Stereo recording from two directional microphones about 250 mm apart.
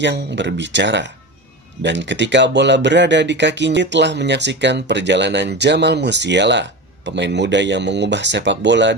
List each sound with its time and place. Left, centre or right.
0.0 s speech: right